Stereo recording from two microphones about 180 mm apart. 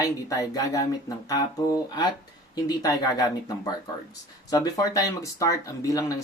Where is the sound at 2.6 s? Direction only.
20° left (ahead or behind).